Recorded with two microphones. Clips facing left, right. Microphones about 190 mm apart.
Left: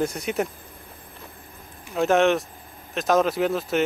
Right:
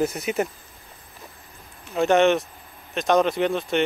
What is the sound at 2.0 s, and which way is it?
Speech, centre (ahead or behind).